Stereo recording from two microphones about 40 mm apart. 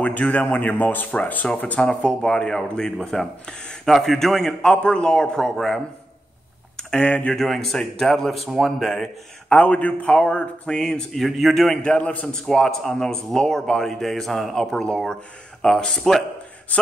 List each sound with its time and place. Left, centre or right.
0.3 s a man's voice: left
1.8 s a man's voice: left; by 4.6 s centre
4.8 s speech: left
6.8 s speech: left
7.3 s a man's voice: centre
9.5 s a man's voice: left
11.1 s a man's voice: centre
11.8 s speech: left
12.3 s a man's voice: centre
14.5 s a man's voice: centre
16.7 s a man's voice: left